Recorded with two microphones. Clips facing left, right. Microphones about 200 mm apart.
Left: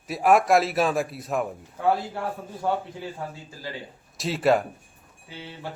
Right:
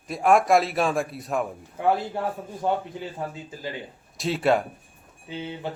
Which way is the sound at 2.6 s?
20° right (ahead or behind).